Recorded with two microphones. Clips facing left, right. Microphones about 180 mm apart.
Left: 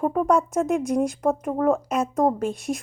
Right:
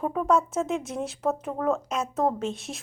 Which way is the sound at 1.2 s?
15° left (ahead or behind).